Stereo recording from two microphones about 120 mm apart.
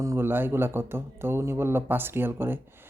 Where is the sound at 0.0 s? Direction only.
20° right (ahead or behind).